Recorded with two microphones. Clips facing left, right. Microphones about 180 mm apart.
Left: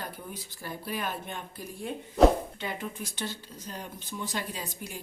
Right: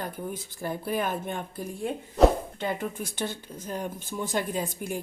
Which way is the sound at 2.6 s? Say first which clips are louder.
Right 5 dB; 50° right (ahead or behind).